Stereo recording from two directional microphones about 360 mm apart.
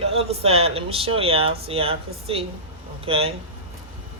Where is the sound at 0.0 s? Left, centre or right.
Centre.